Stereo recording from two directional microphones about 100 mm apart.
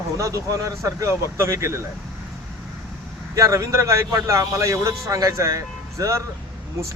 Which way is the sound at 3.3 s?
30° right (ahead or behind).